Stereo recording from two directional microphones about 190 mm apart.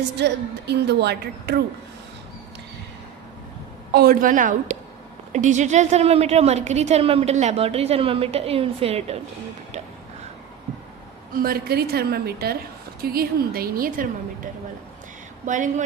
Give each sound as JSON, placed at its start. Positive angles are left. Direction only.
{"t": 0.7, "sound": "speech", "side_deg": -60}
{"t": 3.9, "sound": "a woman's voice", "side_deg": -50}
{"t": 11.3, "sound": "a woman's voice", "side_deg": -50}